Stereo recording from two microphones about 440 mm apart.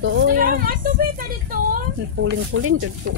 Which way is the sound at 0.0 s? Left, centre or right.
Right.